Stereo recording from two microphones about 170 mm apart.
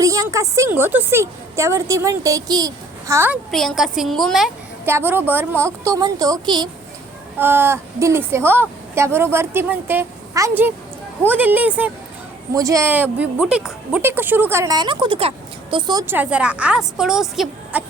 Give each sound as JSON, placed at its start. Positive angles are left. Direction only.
{"t": 0.0, "sound": "a woman's voice", "side_deg": -20}
{"t": 3.5, "sound": "a woman's voice", "side_deg": 0}
{"t": 4.9, "sound": "a woman's voice", "side_deg": -15}
{"t": 7.3, "sound": "a woman's voice", "side_deg": -10}